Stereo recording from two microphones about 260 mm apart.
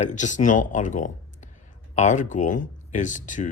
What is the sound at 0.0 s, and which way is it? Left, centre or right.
Speech, left.